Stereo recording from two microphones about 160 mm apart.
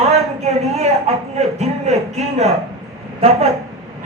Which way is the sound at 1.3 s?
40° right (ahead or behind).